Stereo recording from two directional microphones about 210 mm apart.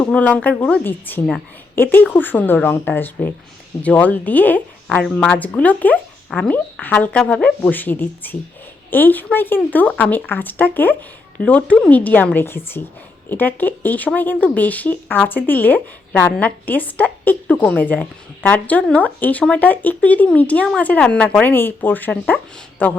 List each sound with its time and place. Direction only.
0.0 s speech: 5° left (ahead or behind)